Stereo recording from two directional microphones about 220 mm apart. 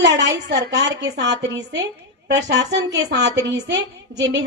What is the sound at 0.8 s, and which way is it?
A woman's voice, 50° right (ahead or behind).